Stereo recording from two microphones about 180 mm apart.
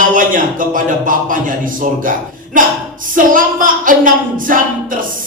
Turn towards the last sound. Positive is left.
turn(degrees=-50)  # may be behind; listen again after turning